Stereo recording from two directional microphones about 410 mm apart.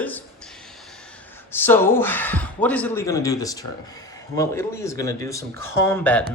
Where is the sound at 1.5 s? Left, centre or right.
Centre.